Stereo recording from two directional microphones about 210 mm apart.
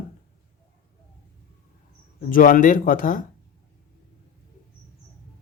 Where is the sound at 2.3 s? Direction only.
40° left (ahead or behind).